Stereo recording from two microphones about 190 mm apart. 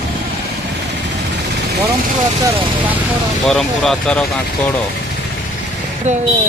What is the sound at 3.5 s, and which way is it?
Speech, centre (ahead or behind).